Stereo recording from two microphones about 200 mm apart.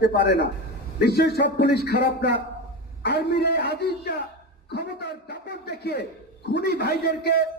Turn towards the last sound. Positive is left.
turn(degrees=55)  # may be behind; listen again after turning